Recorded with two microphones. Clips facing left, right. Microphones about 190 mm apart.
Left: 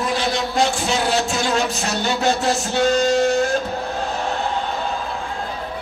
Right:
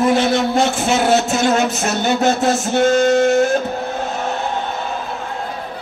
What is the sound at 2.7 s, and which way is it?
Music, 50° right (ahead or behind).